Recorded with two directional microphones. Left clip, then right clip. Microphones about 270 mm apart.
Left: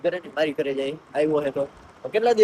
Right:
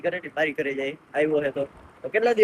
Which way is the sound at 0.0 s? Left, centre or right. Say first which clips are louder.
Left 2 dB; centre.